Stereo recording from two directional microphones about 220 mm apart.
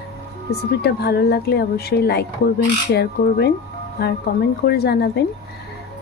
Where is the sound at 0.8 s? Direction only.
45° left (ahead or behind).